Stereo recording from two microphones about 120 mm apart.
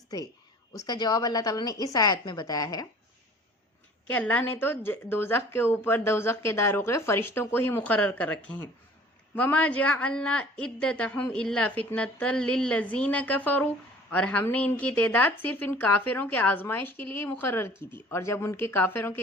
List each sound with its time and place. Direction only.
0.7 s a woman's voice: 35° left (ahead or behind)
4.1 s speech: 15° left (ahead or behind)